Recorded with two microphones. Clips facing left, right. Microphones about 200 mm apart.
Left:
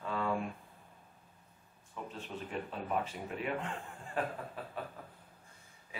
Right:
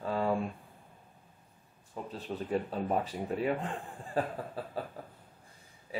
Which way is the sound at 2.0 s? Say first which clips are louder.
Right 8 dB; 35° right (ahead or behind).